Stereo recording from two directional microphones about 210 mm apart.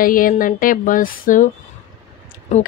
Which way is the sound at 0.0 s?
40° left (ahead or behind).